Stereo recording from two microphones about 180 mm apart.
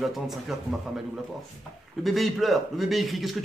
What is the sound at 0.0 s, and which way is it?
A man's voice, centre (ahead or behind).